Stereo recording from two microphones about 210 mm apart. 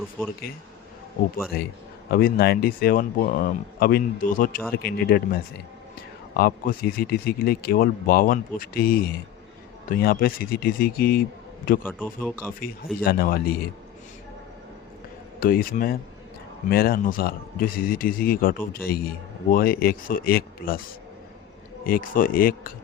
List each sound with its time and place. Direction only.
0.2 s speech: 10° left (ahead or behind)
2.0 s speech: 45° left (ahead or behind)
11.8 s speech: 10° left (ahead or behind)
12.5 s speech: 45° left (ahead or behind)
15.4 s speech: 45° left (ahead or behind)
21.8 s speech: 40° left (ahead or behind)